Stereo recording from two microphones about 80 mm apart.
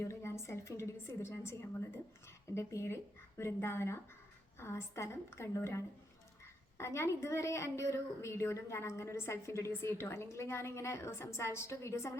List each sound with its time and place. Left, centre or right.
0.1 s a woman's voice: left